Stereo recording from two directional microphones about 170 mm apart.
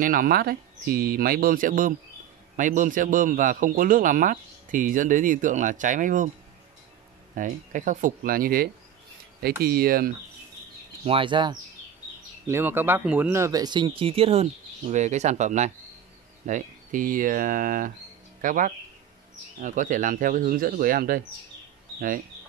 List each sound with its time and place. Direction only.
0.0 s a man's voice: 55° right (ahead or behind)
7.3 s a man's voice: 50° right (ahead or behind)
11.1 s speech: 30° right (ahead or behind)
12.4 s a man's voice: 15° right (ahead or behind); by 21.2 s 60° right (ahead or behind)